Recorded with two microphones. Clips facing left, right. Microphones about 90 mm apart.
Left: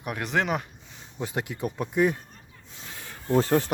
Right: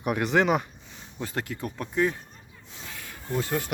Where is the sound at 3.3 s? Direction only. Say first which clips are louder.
Left 7 dB; 35° left (ahead or behind).